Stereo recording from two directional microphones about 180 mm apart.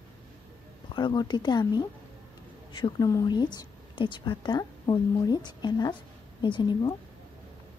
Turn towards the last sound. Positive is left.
turn(degrees=25)  # may be behind; listen again after turning